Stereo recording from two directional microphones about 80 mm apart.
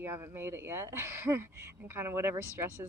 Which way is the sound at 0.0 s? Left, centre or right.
Right.